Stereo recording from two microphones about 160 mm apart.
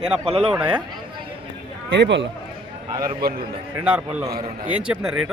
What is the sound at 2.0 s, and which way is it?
Speech, 90° right.